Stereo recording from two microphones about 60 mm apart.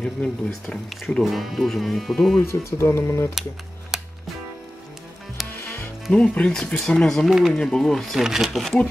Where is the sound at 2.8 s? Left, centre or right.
Left.